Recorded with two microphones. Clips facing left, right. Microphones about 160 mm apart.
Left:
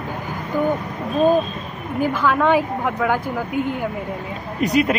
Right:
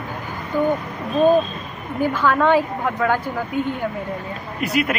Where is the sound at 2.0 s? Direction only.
10° left (ahead or behind).